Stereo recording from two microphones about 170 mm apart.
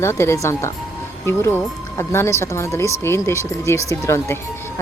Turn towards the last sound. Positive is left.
turn(degrees=15)  # may be behind; listen again after turning